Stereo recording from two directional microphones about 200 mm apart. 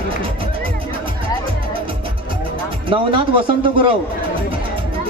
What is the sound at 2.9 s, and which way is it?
A man's voice, 25° right (ahead or behind).